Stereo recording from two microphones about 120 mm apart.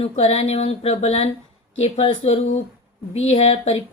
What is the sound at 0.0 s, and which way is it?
Speech, 55° left (ahead or behind).